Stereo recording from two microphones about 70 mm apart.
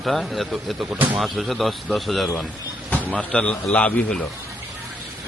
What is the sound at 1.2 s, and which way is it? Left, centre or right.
Speech, centre.